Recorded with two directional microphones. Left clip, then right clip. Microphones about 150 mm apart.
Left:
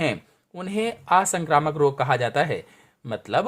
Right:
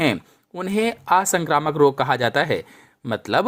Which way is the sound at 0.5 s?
25° right (ahead or behind).